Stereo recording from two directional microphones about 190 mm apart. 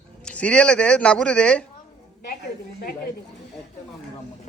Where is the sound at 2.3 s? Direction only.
55° left (ahead or behind).